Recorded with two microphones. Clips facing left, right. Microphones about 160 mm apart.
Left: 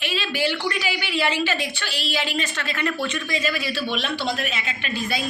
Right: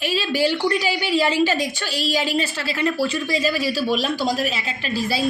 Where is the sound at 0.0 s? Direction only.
40° right (ahead or behind).